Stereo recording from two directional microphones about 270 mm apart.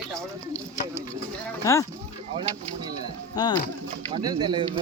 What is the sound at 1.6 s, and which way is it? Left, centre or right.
Speech, centre.